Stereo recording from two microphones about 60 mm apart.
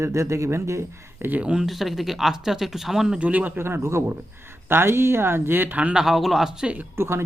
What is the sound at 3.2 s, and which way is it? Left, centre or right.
Speech, right.